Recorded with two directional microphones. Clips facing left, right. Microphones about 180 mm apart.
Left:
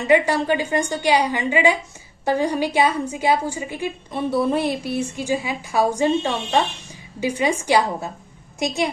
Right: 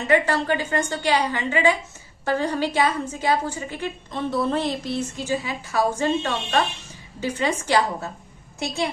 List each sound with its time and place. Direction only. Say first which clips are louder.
0.1 s a woman's voice: left 3 dB; 15° left (ahead or behind)